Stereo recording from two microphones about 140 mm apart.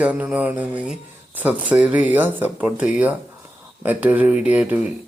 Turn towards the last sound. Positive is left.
turn(degrees=-10)  # may be behind; listen again after turning